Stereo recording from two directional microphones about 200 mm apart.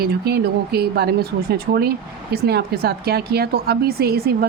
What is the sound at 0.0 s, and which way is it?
A woman's voice, 55° right (ahead or behind).